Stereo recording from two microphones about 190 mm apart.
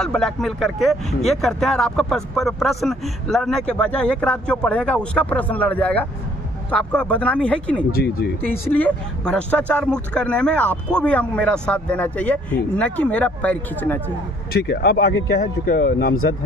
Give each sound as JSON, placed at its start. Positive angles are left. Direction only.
{"t": 0.0, "sound": "speech", "side_deg": 5}
{"t": 7.9, "sound": "speech", "side_deg": 55}
{"t": 8.4, "sound": "speech", "side_deg": 10}
{"t": 14.5, "sound": "speech", "side_deg": 60}